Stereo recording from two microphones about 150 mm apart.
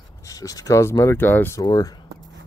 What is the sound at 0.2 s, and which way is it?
Speech, 25° left (ahead or behind).